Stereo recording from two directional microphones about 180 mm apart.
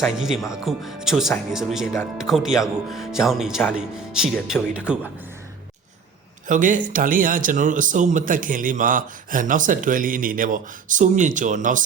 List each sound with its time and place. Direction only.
0.0 s speech: centre (ahead or behind)
6.5 s speech: 45° right (ahead or behind)